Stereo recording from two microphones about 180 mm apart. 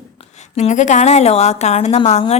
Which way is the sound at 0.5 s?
40° left (ahead or behind).